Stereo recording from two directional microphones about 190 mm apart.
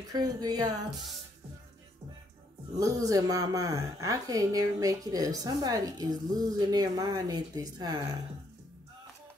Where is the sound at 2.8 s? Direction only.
20° right (ahead or behind).